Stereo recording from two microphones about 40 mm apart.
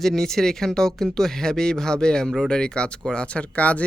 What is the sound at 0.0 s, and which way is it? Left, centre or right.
Speech, centre.